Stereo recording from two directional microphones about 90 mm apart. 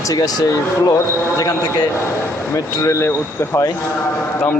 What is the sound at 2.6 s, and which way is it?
Speech, 35° left (ahead or behind).